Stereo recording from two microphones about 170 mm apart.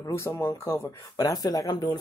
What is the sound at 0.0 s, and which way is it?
Speech, 20° left (ahead or behind).